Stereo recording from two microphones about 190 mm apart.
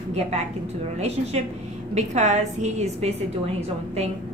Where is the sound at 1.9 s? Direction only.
35° right (ahead or behind).